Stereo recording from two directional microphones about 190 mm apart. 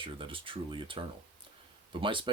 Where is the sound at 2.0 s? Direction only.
25° right (ahead or behind).